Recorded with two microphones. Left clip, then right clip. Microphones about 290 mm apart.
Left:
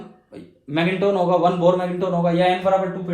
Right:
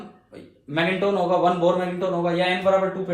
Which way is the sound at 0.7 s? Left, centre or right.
Left.